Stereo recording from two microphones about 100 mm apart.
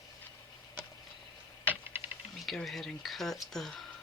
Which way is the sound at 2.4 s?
Centre (ahead or behind).